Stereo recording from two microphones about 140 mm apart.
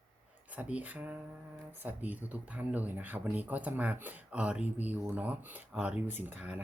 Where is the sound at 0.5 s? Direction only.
10° right (ahead or behind).